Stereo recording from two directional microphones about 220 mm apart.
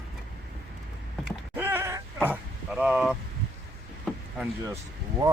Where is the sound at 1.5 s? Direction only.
10° right (ahead or behind).